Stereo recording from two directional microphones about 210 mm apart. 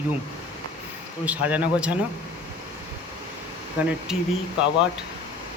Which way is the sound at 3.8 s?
5° right (ahead or behind).